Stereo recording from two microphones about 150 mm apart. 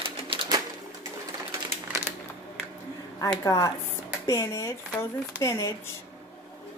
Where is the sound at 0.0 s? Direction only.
35° right (ahead or behind).